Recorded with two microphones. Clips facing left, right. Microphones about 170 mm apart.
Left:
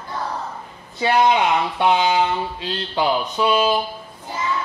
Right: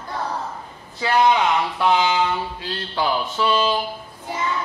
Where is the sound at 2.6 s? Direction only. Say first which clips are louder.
Left 2 dB; 20° left (ahead or behind).